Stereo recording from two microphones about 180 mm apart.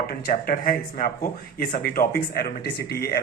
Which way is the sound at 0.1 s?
55° left (ahead or behind).